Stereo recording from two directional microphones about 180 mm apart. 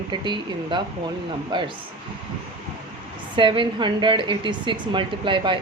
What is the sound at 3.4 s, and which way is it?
A woman's voice, 25° right (ahead or behind).